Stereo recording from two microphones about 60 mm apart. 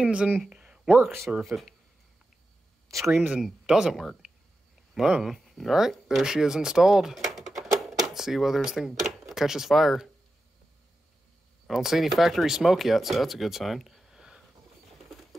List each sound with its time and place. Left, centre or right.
0.0 s speech: centre
0.5 s a sound: centre
1.4 s speech: centre
2.9 s speech: centre
11.6 s speech: centre